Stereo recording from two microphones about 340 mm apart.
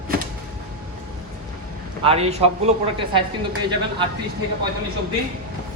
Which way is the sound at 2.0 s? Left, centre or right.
Centre.